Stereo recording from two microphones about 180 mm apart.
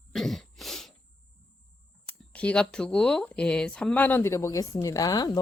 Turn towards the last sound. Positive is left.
turn(degrees=20)  # may be behind; listen again after turning